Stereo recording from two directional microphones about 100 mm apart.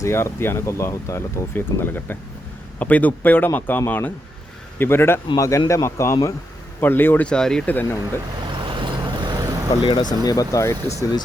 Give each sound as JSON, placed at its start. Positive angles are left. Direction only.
{"t": 0.0, "sound": "speech", "side_deg": 25}
{"t": 7.3, "sound": "speech", "side_deg": 5}
{"t": 7.7, "sound": "speech", "side_deg": 15}
{"t": 8.5, "sound": "vehicle", "side_deg": -55}
{"t": 9.8, "sound": "speech", "side_deg": 50}
{"t": 10.2, "sound": "speech", "side_deg": 35}